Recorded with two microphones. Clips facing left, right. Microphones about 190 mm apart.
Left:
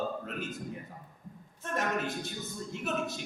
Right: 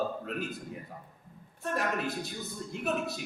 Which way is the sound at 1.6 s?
35° right (ahead or behind).